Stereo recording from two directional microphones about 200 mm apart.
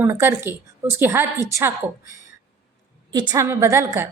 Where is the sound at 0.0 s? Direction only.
15° right (ahead or behind).